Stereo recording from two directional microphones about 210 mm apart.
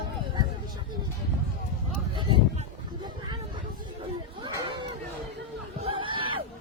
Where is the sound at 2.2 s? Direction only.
20° right (ahead or behind).